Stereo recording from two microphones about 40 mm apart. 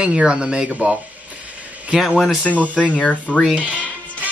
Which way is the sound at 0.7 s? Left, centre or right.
Right.